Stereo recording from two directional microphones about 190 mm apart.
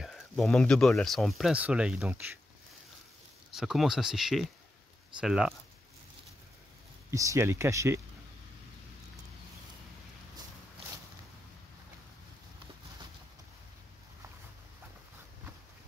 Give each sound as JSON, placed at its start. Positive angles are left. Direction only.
{"t": 0.0, "sound": "speech", "side_deg": 0}
{"t": 3.5, "sound": "speech", "side_deg": 0}
{"t": 7.1, "sound": "speech", "side_deg": -15}